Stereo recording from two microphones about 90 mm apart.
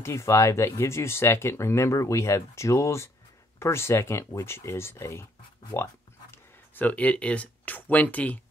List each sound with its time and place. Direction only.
0.0 s speech: 30° left (ahead or behind)
6.3 s speech: 20° left (ahead or behind)